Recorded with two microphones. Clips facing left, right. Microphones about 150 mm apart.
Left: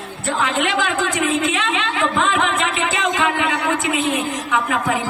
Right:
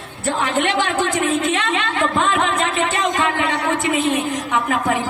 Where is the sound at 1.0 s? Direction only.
40° right (ahead or behind).